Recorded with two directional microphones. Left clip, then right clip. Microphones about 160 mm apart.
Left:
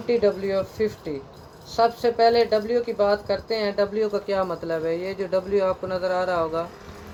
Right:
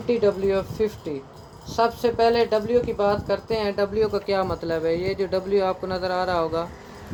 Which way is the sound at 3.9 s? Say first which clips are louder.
Right 1 dB; 35° right (ahead or behind).